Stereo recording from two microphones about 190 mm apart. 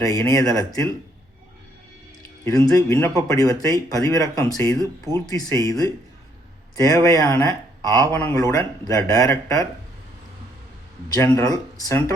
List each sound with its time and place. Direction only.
0.0 s speech: 15° left (ahead or behind)
2.4 s speech: 15° left (ahead or behind)
4.8 s speech: 20° right (ahead or behind)
5.3 s speech: 20° left (ahead or behind)
11.1 s speech: 15° left (ahead or behind)